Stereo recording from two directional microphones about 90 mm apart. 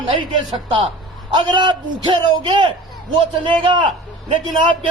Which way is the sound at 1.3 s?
60° right (ahead or behind).